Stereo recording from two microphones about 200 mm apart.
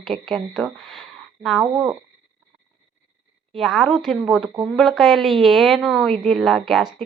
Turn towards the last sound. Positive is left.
turn(degrees=0)  # may be behind; listen again after turning